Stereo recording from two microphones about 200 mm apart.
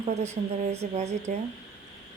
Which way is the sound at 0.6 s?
35° right (ahead or behind).